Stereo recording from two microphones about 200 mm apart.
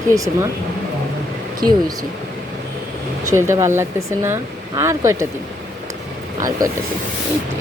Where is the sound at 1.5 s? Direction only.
20° right (ahead or behind).